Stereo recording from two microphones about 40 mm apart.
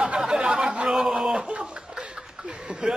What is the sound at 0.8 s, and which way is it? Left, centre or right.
Speech, centre.